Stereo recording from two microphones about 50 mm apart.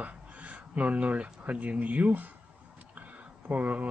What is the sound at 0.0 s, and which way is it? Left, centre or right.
Speech, right.